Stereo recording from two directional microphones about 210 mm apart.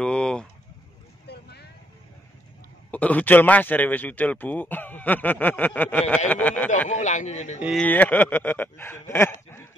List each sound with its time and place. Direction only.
0.0 s pigeon: 5° left (ahead or behind)
1.2 s vehicle: 50° left (ahead or behind)
2.9 s a man's voice: 5° left (ahead or behind)
6.9 s speech: 35° left (ahead or behind)
7.6 s a man's voice: 5° left (ahead or behind)